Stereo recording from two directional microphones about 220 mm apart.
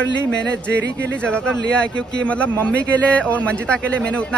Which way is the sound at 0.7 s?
50° right (ahead or behind).